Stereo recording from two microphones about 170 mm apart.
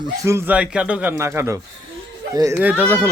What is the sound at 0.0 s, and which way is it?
Speech, 20° right (ahead or behind).